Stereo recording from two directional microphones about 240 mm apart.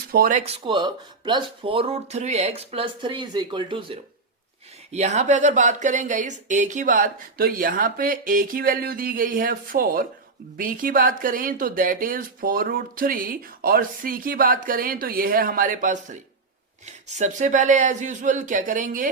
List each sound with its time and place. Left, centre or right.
0.1 s speech: right